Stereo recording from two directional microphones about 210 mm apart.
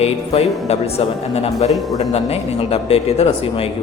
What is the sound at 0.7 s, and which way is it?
Speech, 30° left (ahead or behind).